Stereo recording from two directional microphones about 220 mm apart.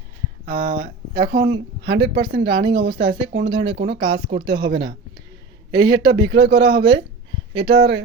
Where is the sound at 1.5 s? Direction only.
50° right (ahead or behind).